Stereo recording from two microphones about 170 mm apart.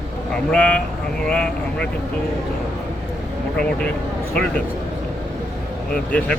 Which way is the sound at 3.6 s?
5° left (ahead or behind).